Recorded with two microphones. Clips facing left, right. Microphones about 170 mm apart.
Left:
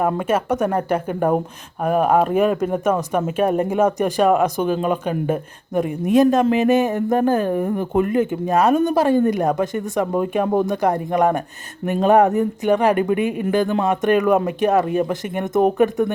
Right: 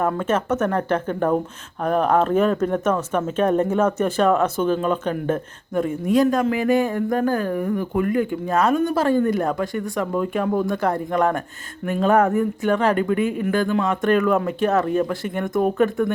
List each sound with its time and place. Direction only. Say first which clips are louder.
0.1 s speech: left 2 dB; 10° left (ahead or behind)